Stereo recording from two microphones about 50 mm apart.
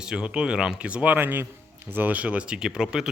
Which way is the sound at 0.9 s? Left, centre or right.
Right.